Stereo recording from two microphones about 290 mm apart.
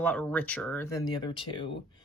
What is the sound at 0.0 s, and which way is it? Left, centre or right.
Speech, centre.